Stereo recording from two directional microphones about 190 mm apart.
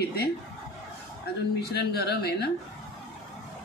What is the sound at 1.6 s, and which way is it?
Speech, 55° left (ahead or behind).